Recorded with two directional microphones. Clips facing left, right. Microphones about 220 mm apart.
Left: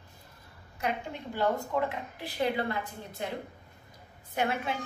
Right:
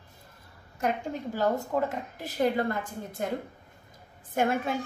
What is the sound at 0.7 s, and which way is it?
A woman's voice, 45° right (ahead or behind).